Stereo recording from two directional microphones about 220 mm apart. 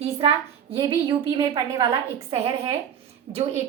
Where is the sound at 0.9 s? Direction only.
15° right (ahead or behind).